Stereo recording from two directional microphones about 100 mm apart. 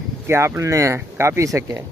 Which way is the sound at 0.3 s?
25° right (ahead or behind).